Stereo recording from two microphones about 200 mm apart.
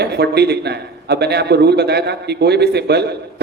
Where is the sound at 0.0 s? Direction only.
55° right (ahead or behind).